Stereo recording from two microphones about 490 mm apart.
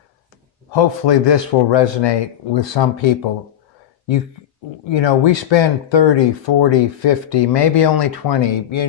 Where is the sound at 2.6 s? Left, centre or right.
Left.